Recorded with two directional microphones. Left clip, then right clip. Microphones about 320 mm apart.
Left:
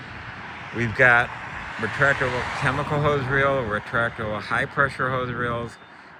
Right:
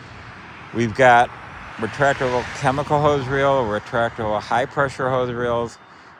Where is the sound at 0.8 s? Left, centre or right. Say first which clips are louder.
Right 4 dB; right.